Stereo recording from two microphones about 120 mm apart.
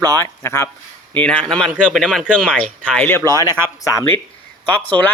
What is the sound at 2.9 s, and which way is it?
Speech, 20° left (ahead or behind).